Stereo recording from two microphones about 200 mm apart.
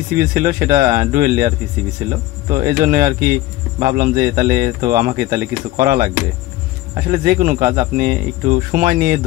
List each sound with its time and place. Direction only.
0.2 s speech: 45° right (ahead or behind)
7.1 s speech: 45° right (ahead or behind)